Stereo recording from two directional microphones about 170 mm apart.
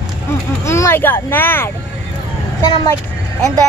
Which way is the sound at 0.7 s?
15° left (ahead or behind).